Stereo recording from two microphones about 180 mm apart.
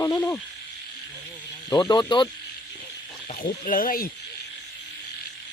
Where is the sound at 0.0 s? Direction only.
15° left (ahead or behind).